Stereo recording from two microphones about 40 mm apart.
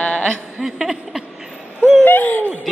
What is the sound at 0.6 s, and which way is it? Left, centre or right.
Speech, centre.